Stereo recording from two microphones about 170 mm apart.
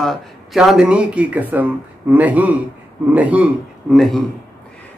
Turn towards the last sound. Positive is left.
turn(degrees=0)  # may be behind; listen again after turning